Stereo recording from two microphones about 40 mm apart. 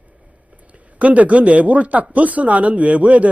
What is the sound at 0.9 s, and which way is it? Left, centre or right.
Speech, right.